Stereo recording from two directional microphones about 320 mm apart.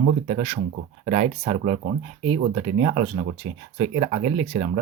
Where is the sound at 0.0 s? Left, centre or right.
Right.